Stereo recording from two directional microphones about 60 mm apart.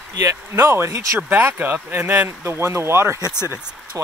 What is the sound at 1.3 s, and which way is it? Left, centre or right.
Speech, right.